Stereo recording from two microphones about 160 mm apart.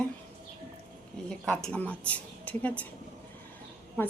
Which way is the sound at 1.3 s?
5° left (ahead or behind).